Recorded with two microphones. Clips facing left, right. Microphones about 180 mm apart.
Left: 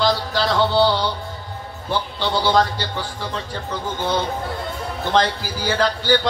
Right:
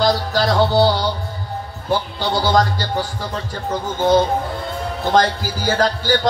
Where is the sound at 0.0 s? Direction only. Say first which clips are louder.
Right 3 dB; 45° right (ahead or behind).